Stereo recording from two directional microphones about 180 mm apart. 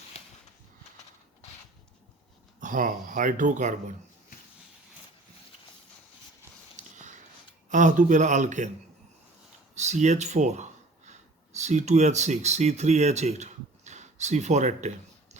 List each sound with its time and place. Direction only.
2.6 s speech: 45° right (ahead or behind)
6.7 s a sound: 40° right (ahead or behind)
7.7 s speech: 45° right (ahead or behind)
9.7 s speech: 40° right (ahead or behind)